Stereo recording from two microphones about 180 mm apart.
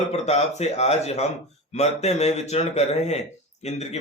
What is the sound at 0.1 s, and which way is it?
A man's voice, 35° left (ahead or behind).